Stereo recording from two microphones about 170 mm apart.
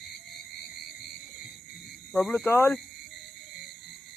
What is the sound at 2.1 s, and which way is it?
Speech, 10° left (ahead or behind).